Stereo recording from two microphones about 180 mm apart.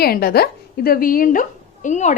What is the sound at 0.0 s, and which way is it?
A woman's voice, 60° left (ahead or behind).